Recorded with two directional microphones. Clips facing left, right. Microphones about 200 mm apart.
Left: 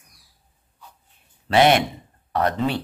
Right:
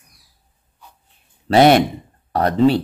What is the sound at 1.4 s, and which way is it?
A man's voice, 40° right (ahead or behind).